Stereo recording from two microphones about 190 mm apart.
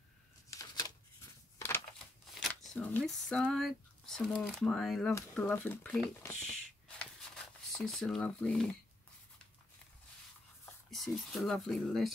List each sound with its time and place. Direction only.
0.5 s shuffling cards: 20° left (ahead or behind)
2.4 s speech: centre (ahead or behind)
10.9 s speech: centre (ahead or behind)